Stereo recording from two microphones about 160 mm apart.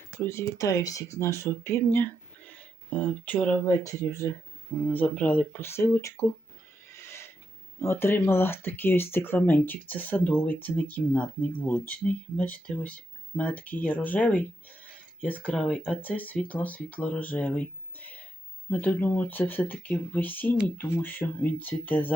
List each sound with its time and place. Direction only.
0.2 s speech: 15° left (ahead or behind)
6.8 s neigh: 15° left (ahead or behind)
7.8 s speech: 15° left (ahead or behind)